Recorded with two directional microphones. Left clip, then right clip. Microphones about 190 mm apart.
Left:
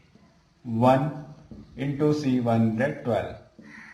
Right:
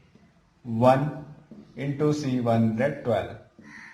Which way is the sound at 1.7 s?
25° right (ahead or behind).